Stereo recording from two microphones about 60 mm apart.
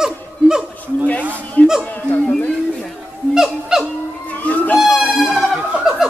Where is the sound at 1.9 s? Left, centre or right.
Left.